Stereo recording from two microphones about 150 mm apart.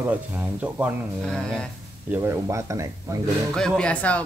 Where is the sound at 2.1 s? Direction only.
15° right (ahead or behind).